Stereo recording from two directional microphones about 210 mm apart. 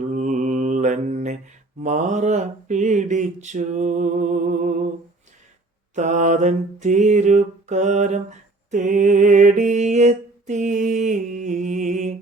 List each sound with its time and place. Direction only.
0.0 s mantra: 35° right (ahead or behind)
3.4 s a sound: 35° right (ahead or behind)
5.9 s mantra: 35° right (ahead or behind)